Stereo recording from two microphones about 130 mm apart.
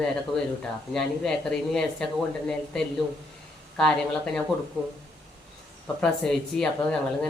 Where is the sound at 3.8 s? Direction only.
5° left (ahead or behind).